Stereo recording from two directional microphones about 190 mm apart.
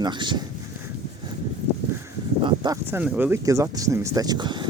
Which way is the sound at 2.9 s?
10° right (ahead or behind).